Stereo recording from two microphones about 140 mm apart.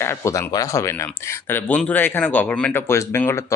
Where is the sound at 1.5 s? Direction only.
10° left (ahead or behind).